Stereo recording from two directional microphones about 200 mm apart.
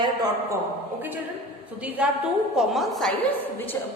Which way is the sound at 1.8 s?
5° right (ahead or behind).